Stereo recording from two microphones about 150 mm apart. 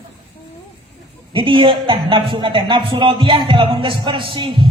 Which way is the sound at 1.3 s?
35° right (ahead or behind).